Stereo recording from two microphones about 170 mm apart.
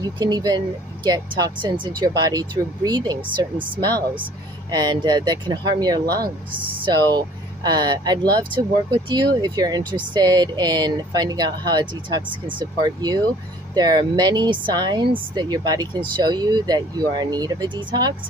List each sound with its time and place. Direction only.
0.2 s speech: 25° right (ahead or behind)
4.6 s speech: 25° right (ahead or behind)